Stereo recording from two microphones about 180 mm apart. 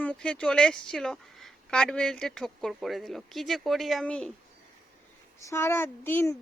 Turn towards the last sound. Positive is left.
turn(degrees=15)  # may be behind; listen again after turning